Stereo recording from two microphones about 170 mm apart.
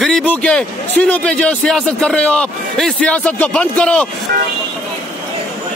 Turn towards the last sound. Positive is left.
turn(degrees=-65)  # may be behind; listen again after turning